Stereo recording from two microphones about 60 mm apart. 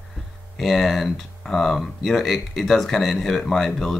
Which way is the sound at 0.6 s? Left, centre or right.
Centre.